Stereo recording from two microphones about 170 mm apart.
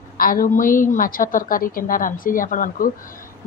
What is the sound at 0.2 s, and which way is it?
A woman's voice, 55° left (ahead or behind).